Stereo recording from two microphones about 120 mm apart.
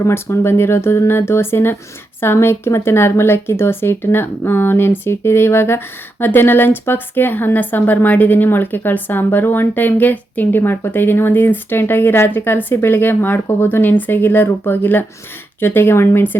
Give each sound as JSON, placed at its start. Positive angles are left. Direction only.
{"t": 0.0, "sound": "speech", "side_deg": 20}